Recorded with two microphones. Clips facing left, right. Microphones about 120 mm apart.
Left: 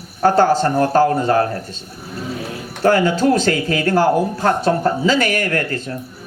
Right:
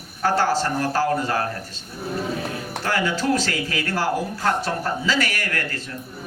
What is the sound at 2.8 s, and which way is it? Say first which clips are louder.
Speech: left 9 dB; 40° left (ahead or behind).